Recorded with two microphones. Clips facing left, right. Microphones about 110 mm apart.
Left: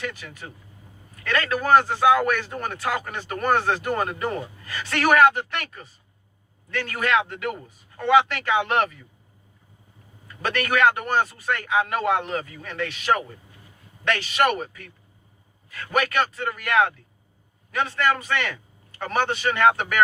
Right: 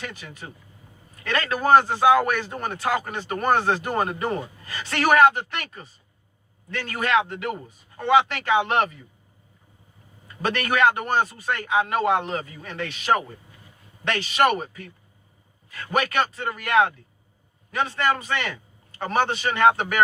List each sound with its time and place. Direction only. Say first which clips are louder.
0.0 s speech: left 3 dB; 30° right (ahead or behind)
10.4 s speech: even; 25° right (ahead or behind)
15.9 s speech: even; 30° right (ahead or behind)